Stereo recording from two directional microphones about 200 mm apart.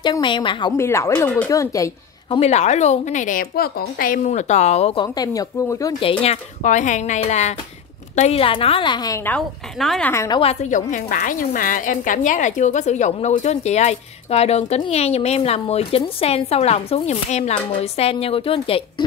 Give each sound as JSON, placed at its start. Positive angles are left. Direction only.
{"t": 0.0, "sound": "a woman's voice", "side_deg": 25}
{"t": 2.2, "sound": "a woman's voice", "side_deg": 30}
{"t": 10.1, "sound": "speech", "side_deg": 15}
{"t": 10.4, "sound": "a woman's voice", "side_deg": 35}